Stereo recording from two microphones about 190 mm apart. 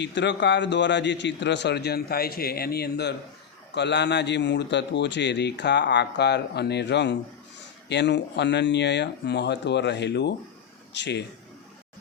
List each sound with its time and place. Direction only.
0.0 s a man's voice: 65° left (ahead or behind)